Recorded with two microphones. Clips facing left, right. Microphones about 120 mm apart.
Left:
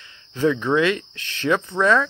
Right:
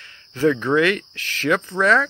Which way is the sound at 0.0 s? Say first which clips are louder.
Right 2 dB; 20° left (ahead or behind).